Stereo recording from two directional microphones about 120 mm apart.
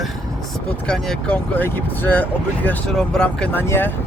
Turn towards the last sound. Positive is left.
turn(degrees=20)  # may be behind; listen again after turning